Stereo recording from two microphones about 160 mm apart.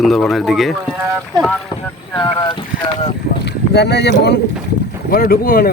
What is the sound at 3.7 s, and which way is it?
Speech, 90° left.